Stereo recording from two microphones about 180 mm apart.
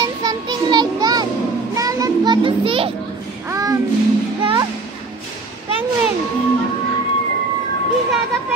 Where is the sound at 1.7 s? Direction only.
20° right (ahead or behind).